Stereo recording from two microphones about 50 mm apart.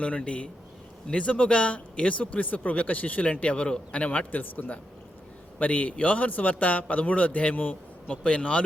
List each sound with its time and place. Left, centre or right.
0.0 s a man's voice: left